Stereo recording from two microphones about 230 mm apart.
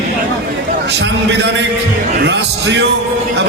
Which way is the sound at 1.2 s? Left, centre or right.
Right.